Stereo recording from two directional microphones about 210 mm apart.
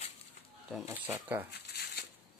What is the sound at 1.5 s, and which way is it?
Shuffling cards, 50° left (ahead or behind).